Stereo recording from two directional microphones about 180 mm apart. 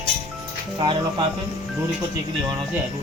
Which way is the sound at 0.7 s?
25° right (ahead or behind).